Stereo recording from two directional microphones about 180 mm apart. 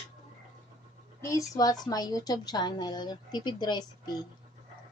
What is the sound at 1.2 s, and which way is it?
A woman's voice, 15° left (ahead or behind).